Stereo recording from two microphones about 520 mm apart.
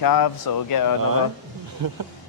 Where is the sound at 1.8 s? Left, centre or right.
Right.